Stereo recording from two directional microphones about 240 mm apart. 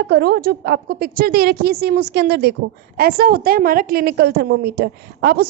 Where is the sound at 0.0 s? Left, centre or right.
Right.